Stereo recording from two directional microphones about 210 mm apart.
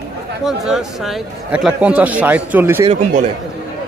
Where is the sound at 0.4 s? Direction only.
Centre (ahead or behind).